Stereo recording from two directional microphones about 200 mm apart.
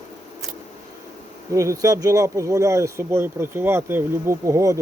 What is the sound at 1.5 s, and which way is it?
Speech, 15° right (ahead or behind).